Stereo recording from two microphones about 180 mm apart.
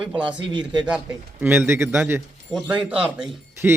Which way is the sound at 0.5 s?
25° right (ahead or behind).